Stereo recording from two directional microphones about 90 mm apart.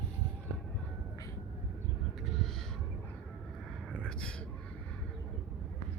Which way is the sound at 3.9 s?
10° left (ahead or behind).